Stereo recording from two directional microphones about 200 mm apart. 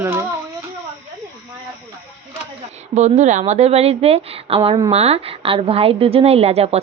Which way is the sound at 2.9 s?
35° right (ahead or behind).